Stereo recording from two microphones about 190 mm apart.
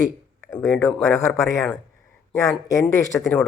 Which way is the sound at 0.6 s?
10° left (ahead or behind).